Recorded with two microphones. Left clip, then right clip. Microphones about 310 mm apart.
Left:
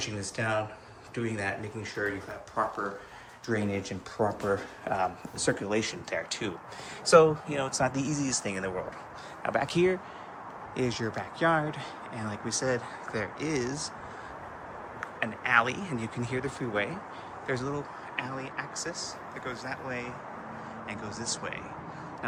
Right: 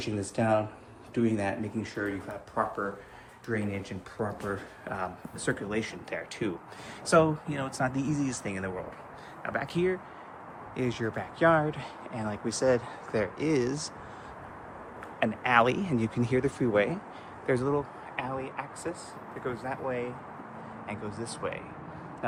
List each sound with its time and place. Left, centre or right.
0.0 s speech: centre
3.4 s speech: centre
15.2 s speech: centre